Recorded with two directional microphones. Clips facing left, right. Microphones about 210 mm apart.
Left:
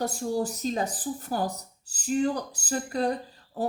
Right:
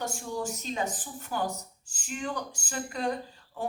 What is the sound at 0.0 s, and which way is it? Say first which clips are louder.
Speech: left 6 dB; 35° left (ahead or behind).